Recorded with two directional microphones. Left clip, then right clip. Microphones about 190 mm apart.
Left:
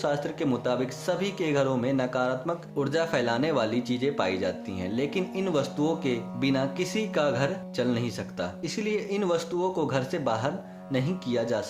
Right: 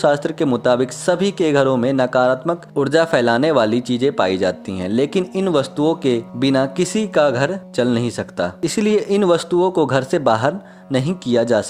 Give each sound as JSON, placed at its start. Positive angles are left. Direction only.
{"t": 0.0, "sound": "speech", "side_deg": -55}